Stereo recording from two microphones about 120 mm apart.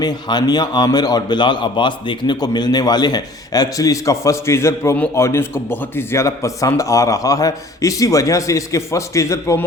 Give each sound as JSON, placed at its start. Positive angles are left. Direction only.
{"t": 0.0, "sound": "a man's voice", "side_deg": 35}